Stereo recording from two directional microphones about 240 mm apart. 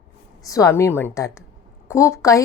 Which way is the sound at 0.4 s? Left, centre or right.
Centre.